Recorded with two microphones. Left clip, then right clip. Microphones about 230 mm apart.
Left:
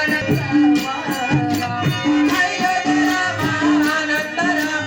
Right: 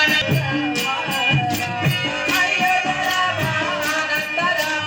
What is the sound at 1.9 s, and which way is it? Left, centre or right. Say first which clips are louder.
Music: left 4 dB; left.